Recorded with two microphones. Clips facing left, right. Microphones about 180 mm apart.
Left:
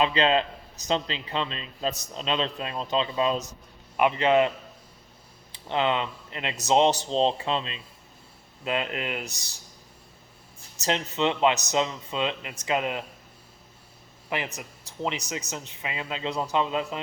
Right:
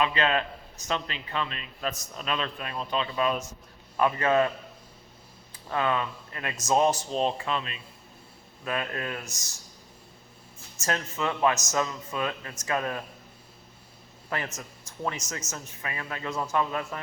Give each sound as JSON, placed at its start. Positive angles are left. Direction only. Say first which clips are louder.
{"t": 0.0, "sound": "a man's voice", "louder": "left 3 dB", "side_deg": 25}
{"t": 5.6, "sound": "a man's voice", "louder": "left 2 dB", "side_deg": 25}
{"t": 10.8, "sound": "a man's voice", "louder": "left 4 dB", "side_deg": 20}
{"t": 14.3, "sound": "a man's voice", "louder": "left 2 dB", "side_deg": 15}